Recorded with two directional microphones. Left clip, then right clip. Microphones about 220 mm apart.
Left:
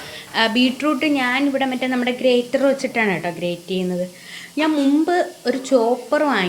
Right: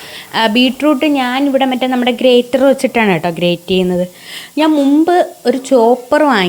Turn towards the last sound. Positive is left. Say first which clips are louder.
# right 8 dB
turn(degrees=-40)  # may be behind; listen again after turning